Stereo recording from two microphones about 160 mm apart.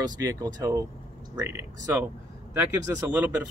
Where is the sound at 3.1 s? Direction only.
10° right (ahead or behind).